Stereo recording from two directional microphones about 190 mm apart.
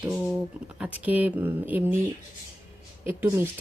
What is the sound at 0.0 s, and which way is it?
Speech, centre (ahead or behind).